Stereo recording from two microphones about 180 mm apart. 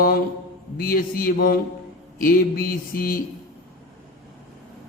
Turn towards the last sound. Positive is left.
turn(degrees=55)  # may be behind; listen again after turning